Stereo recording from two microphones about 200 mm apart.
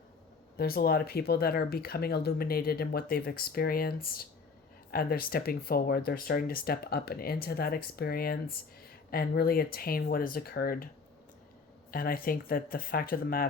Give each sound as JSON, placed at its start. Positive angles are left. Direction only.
{"t": 0.5, "sound": "speech", "side_deg": 50}
{"t": 11.9, "sound": "speech", "side_deg": 45}